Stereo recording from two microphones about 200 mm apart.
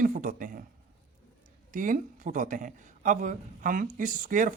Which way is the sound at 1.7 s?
40° right (ahead or behind).